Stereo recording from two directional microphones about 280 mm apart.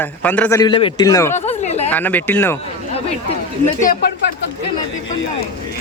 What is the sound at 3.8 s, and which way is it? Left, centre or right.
Speech, left.